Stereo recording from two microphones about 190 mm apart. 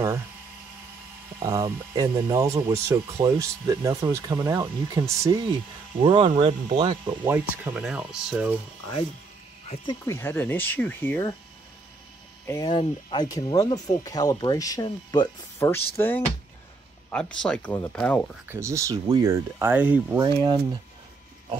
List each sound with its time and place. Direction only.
1.4 s speech: 15° right (ahead or behind)
5.9 s speech: 30° right (ahead or behind)
7.1 s speech: 10° right (ahead or behind)
9.8 s speech: 15° left (ahead or behind)
12.4 s speech: 20° left (ahead or behind)
17.1 s speech: 5° left (ahead or behind)
18.5 s speech: 15° right (ahead or behind)
20.2 s speech: 25° right (ahead or behind)